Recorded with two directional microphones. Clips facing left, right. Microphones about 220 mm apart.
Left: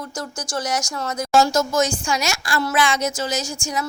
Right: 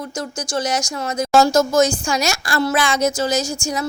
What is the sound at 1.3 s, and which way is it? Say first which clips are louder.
A woman's voice: right 4 dB; 35° right (ahead or behind).